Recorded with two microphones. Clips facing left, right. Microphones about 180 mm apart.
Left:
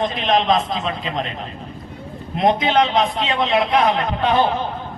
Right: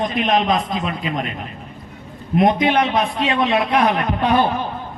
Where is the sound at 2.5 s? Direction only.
25° left (ahead or behind).